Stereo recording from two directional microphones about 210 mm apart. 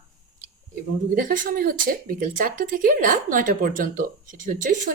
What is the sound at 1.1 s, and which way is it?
A woman's voice, 40° right (ahead or behind).